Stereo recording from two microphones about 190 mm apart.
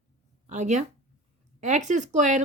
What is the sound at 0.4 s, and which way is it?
Speech, 40° right (ahead or behind).